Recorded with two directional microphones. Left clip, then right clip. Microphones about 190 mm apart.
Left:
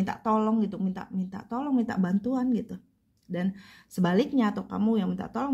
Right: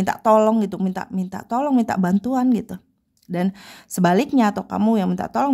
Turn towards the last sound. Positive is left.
turn(degrees=-40)  # may be behind; listen again after turning